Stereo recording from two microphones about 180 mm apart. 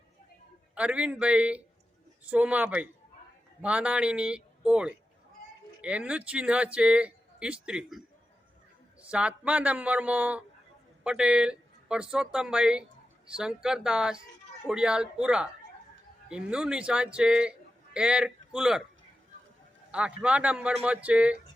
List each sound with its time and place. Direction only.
0.8 s a man's voice: 5° right (ahead or behind)
19.9 s speech: 5° right (ahead or behind)